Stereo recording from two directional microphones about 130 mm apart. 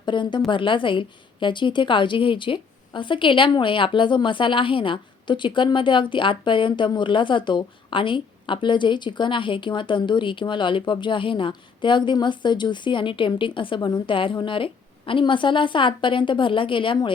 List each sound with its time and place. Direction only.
0.0 s a woman's voice: 35° left (ahead or behind)